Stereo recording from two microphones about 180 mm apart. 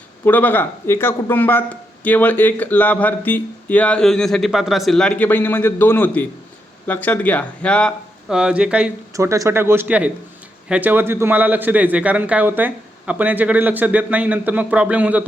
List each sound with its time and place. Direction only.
0.3 s speech: 10° left (ahead or behind); by 8.9 s 5° right (ahead or behind)
9.1 s speech: 15° right (ahead or behind)